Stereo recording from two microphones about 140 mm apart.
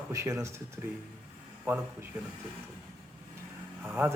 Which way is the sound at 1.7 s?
15° right (ahead or behind).